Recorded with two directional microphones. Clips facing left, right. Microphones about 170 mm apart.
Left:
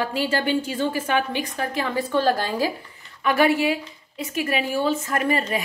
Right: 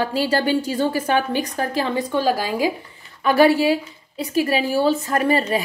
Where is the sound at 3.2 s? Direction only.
35° right (ahead or behind).